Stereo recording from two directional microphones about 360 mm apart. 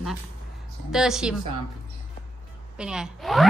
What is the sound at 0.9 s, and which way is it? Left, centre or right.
Speech, centre.